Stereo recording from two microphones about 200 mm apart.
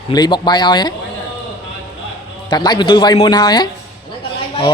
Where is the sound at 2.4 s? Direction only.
20° left (ahead or behind).